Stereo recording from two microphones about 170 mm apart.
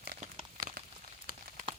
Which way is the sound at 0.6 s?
55° right (ahead or behind).